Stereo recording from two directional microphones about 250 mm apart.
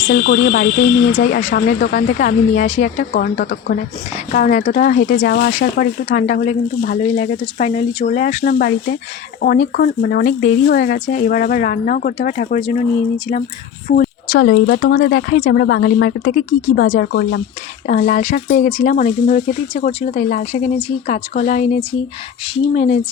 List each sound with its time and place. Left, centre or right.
0.1 s speech: left
13.8 s speech: left